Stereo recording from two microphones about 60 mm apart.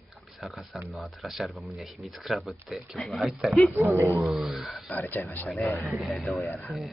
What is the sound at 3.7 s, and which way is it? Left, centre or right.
Speech, right.